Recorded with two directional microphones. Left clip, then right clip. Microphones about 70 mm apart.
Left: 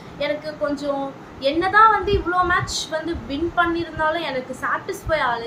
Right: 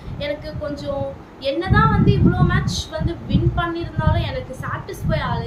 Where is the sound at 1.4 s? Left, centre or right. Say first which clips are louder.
Left 4 dB; left.